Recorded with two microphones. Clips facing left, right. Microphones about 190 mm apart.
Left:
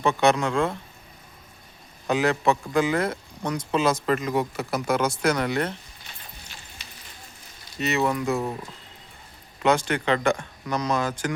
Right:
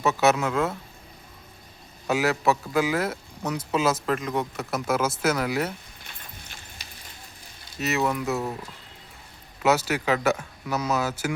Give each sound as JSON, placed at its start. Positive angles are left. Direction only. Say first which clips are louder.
{"t": 0.0, "sound": "speech", "louder": "left 1 dB", "side_deg": -5}
{"t": 2.0, "sound": "speech", "louder": "left 1 dB", "side_deg": -5}
{"t": 6.8, "sound": "a sound", "louder": "even", "side_deg": -40}
{"t": 7.8, "sound": "speech", "louder": "left 1 dB", "side_deg": 0}
{"t": 9.6, "sound": "speech", "louder": "left 1 dB", "side_deg": -5}